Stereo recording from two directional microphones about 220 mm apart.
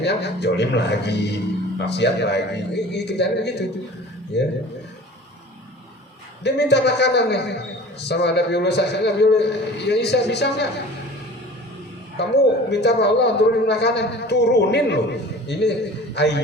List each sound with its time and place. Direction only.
0.0 s a man's voice: 50° left (ahead or behind)
6.4 s a man's voice: 50° left (ahead or behind)
12.2 s a man's voice: 50° left (ahead or behind)